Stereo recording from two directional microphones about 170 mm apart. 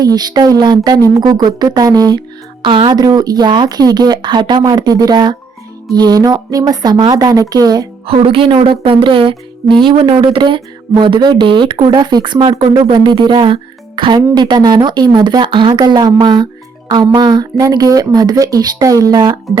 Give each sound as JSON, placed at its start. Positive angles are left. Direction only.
{"t": 0.0, "sound": "speech", "side_deg": -25}
{"t": 8.0, "sound": "speech", "side_deg": -35}